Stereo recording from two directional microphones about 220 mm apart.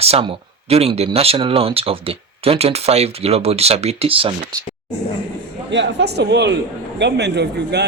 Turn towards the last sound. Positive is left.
turn(degrees=-50)  # may be behind; listen again after turning